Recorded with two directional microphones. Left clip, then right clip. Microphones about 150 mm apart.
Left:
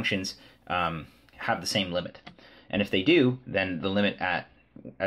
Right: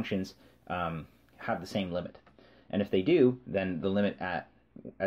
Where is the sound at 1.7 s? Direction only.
40° right (ahead or behind).